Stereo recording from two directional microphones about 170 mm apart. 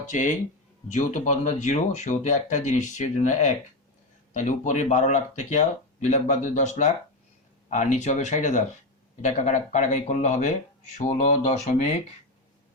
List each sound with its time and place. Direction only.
0.0 s speech: 45° left (ahead or behind)